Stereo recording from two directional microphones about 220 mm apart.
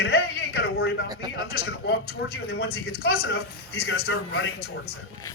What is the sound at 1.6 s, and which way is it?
A woman's voice, 50° left (ahead or behind).